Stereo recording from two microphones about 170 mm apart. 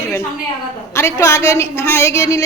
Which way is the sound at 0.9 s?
15° left (ahead or behind).